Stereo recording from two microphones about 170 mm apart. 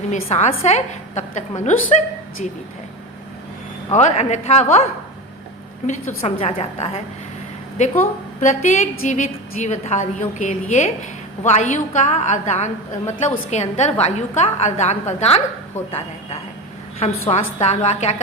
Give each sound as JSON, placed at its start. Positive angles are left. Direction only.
{"t": 0.1, "sound": "a woman's voice", "side_deg": 40}
{"t": 3.9, "sound": "a woman's voice", "side_deg": 40}
{"t": 8.4, "sound": "a woman's voice", "side_deg": 45}